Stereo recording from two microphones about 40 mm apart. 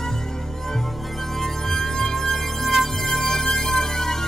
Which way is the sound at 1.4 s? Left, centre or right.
Centre.